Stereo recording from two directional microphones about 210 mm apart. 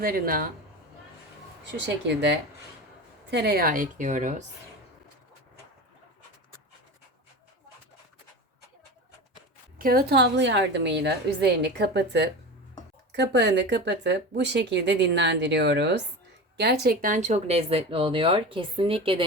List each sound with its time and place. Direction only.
0.0 s a woman's voice: 45° right (ahead or behind)
2.0 s a woman's voice: 55° right (ahead or behind); by 4.4 s 35° right (ahead or behind)
9.7 s a woman's voice: 45° right (ahead or behind); by 19.2 s 25° right (ahead or behind)